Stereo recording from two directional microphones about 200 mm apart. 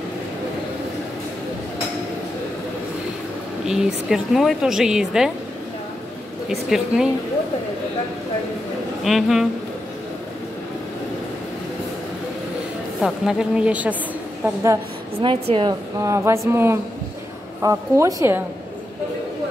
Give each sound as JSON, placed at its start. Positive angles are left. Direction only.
{"t": 3.6, "sound": "speech", "side_deg": 0}
{"t": 6.5, "sound": "speech", "side_deg": 0}
{"t": 9.0, "sound": "speech", "side_deg": 0}
{"t": 13.0, "sound": "a woman's voice", "side_deg": 0}
{"t": 15.2, "sound": "speech", "side_deg": -25}
{"t": 16.0, "sound": "a woman's voice", "side_deg": -15}